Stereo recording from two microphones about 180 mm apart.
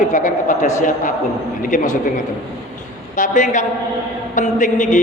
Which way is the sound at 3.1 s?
45° left (ahead or behind).